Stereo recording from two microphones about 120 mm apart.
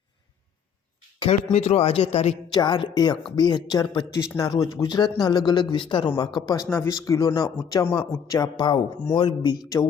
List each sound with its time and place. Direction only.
1.3 s speech: 60° left (ahead or behind)
2.5 s speech: 35° left (ahead or behind)
6.7 s speech: 20° left (ahead or behind)